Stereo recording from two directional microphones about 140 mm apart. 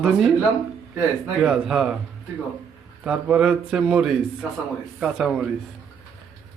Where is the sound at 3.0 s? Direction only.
10° right (ahead or behind).